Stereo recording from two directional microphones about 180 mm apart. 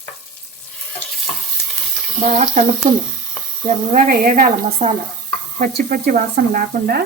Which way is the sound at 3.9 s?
50° right (ahead or behind).